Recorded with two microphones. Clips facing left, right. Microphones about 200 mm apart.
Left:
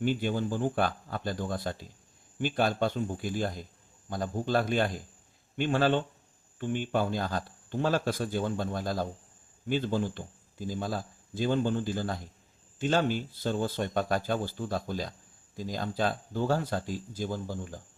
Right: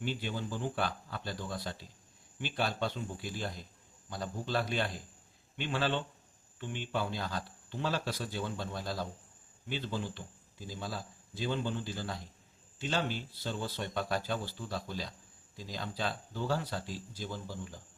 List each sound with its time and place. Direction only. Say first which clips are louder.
0.0 s speech: left 8 dB; 50° left (ahead or behind)